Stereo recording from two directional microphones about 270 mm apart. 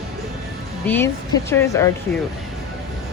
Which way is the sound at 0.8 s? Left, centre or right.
Centre.